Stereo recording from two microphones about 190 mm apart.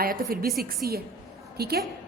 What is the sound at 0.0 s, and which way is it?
A woman's voice, 50° right (ahead or behind).